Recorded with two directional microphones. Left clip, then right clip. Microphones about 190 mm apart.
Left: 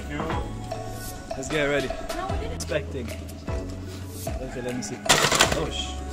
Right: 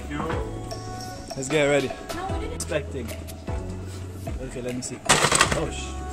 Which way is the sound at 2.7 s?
Centre (ahead or behind).